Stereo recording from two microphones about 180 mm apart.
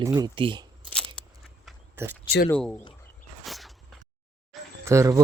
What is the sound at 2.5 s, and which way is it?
Speech, 5° left (ahead or behind).